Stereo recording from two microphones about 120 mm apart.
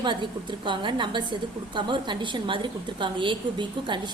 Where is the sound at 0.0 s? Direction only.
40° right (ahead or behind).